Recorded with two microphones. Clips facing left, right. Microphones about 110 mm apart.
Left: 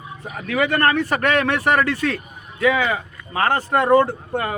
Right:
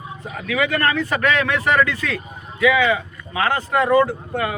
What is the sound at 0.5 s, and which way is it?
A man's voice, 45° left (ahead or behind).